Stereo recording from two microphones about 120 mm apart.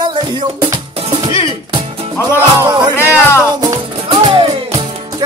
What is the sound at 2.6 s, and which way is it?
Music, 35° right (ahead or behind).